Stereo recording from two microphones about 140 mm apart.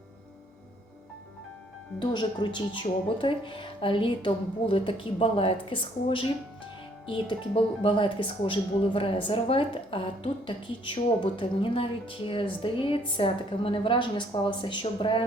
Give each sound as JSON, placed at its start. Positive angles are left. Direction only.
{"t": 2.0, "sound": "speech", "side_deg": 35}